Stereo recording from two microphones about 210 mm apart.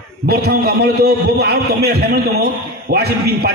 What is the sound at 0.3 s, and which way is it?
A man's voice, 50° right (ahead or behind).